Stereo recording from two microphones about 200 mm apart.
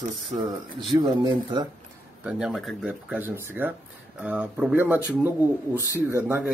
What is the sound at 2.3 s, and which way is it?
Speech, 5° right (ahead or behind).